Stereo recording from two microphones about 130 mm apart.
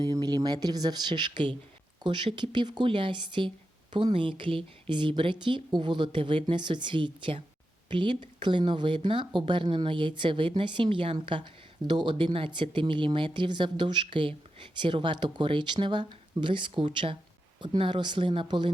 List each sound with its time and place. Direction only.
0.0 s a woman's voice: 30° right (ahead or behind)